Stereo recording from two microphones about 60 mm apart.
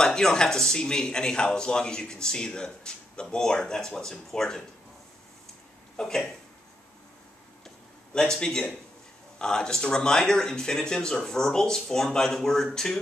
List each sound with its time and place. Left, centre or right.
0.0 s speech: centre
5.9 s speech: centre
7.6 s a sound: centre
9.4 s speech: centre